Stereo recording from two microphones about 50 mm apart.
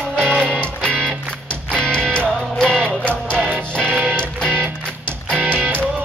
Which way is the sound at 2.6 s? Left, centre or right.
Centre.